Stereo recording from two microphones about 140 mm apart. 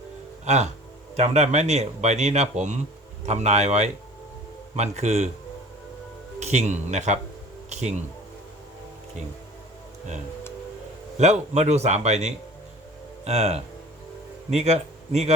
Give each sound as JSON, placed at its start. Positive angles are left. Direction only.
{"t": 0.4, "sound": "speech", "side_deg": -55}
{"t": 6.4, "sound": "speech", "side_deg": -55}
{"t": 11.2, "sound": "a man's voice", "side_deg": -55}